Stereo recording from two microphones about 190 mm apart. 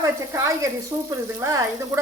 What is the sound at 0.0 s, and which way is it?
A woman's voice, 15° right (ahead or behind).